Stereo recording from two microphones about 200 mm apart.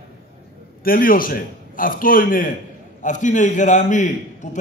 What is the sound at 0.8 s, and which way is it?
A man's voice, 45° left (ahead or behind).